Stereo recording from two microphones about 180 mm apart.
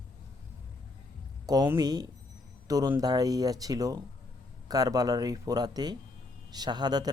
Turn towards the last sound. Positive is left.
turn(degrees=-20)  # may be behind; listen again after turning